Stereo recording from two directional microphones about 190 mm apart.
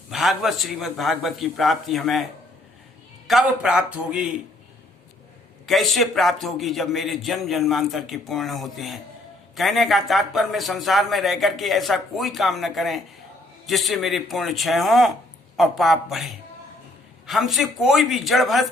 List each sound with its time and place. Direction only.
0.1 s speech: centre (ahead or behind)
3.2 s speech: centre (ahead or behind)
4.1 s speech: 45° right (ahead or behind)
5.6 s speech: centre (ahead or behind)